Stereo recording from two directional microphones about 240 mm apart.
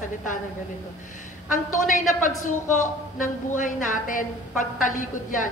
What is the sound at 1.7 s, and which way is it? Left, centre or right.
A man's voice, left.